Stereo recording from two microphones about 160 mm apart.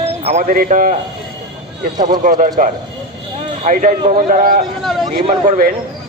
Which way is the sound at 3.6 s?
55° right (ahead or behind).